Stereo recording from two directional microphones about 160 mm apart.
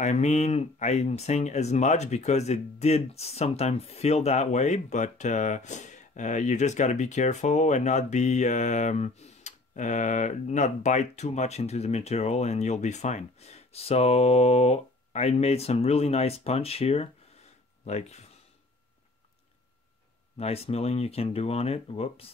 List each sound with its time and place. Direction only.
0.0 s speech: 45° left (ahead or behind)
20.3 s speech: 40° left (ahead or behind)